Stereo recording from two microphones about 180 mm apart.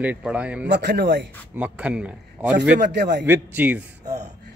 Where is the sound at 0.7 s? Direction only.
65° right (ahead or behind).